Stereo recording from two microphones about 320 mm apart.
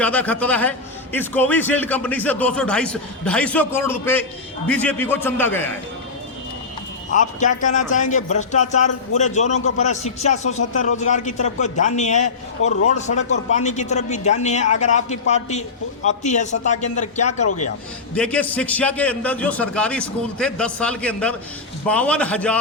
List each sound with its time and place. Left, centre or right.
0.0 s a man's voice: centre
7.1 s speech: left
17.4 s speech: left
18.1 s a man's voice: centre